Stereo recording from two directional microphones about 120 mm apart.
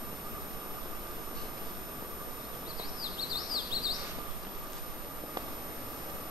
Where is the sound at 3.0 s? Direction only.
35° left (ahead or behind).